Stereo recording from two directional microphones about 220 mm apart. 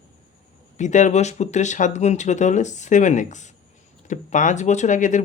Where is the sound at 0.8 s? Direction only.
35° left (ahead or behind).